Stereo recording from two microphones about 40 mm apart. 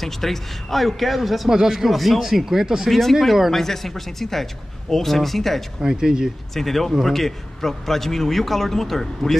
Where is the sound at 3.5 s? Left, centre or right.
Centre.